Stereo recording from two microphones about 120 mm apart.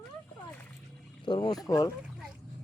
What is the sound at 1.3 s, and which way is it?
Speech, 35° left (ahead or behind).